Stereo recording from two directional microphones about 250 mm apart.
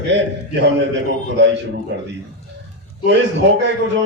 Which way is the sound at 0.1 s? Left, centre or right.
Right.